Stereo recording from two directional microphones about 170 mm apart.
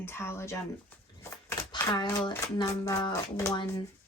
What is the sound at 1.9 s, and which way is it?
Speech, 25° left (ahead or behind).